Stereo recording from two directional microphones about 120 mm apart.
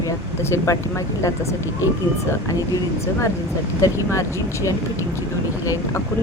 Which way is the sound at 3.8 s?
25° left (ahead or behind).